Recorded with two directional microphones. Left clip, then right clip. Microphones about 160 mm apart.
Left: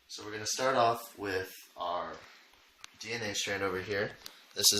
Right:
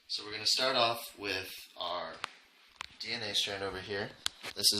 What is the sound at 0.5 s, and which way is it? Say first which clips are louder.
Speech: left 2 dB; 5° right (ahead or behind).